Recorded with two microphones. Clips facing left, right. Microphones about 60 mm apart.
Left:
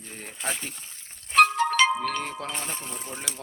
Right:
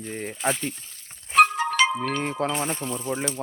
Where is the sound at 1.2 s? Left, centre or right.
Centre.